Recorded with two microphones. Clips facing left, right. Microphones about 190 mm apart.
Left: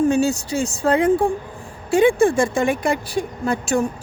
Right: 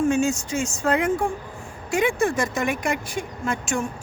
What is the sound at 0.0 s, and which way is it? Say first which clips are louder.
A woman's voice: left 3 dB; 35° left (ahead or behind).